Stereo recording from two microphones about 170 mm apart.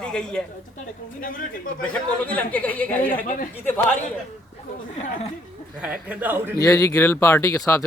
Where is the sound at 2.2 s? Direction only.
10° left (ahead or behind).